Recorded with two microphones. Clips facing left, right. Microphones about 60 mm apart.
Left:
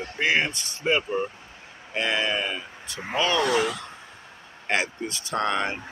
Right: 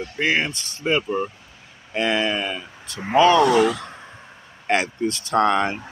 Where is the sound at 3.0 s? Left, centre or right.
Centre.